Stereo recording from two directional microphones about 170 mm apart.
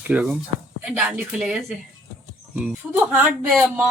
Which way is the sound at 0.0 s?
5° right (ahead or behind).